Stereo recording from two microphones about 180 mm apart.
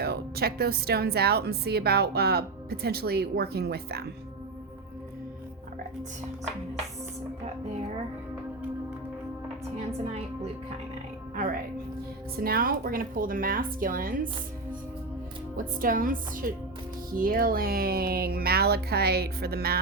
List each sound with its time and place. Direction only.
0.0 s speech: 60° right (ahead or behind)
9.7 s a woman's voice: 35° right (ahead or behind)
12.4 s a woman's voice: 55° right (ahead or behind)
15.5 s a woman's voice: 50° right (ahead or behind)